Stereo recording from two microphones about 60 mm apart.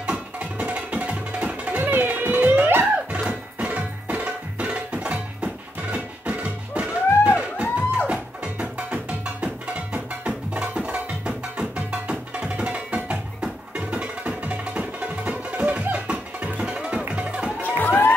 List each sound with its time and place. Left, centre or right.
0.0 s music: centre; by 2.9 s right
3.2 s music: centre
17.6 s music: left